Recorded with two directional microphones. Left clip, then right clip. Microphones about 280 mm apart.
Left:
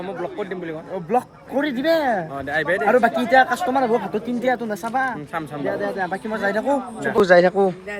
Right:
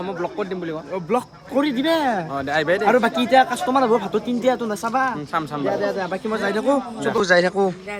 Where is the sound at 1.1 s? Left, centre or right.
Centre.